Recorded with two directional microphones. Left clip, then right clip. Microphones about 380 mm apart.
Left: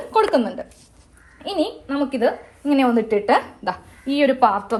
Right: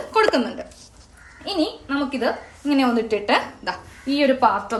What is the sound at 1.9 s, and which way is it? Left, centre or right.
A woman's voice, centre.